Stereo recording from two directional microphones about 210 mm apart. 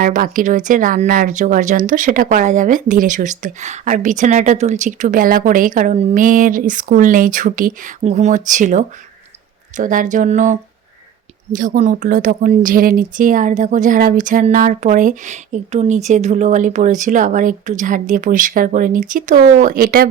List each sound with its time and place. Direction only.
0.0 s speech: 40° right (ahead or behind)